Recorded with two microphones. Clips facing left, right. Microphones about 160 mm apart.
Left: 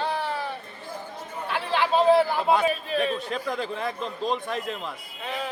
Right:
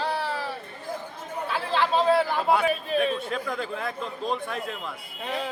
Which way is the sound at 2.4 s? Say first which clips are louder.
Left 1 dB; 5° right (ahead or behind).